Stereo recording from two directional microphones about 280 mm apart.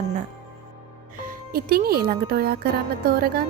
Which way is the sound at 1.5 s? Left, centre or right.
Right.